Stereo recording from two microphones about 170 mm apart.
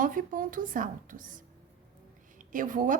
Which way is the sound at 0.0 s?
50° right (ahead or behind).